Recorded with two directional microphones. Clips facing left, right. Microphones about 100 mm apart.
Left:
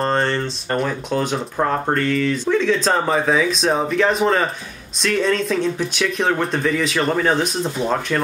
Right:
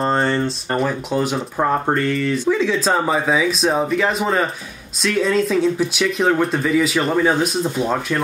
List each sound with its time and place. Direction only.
0.0 s speech: 10° right (ahead or behind)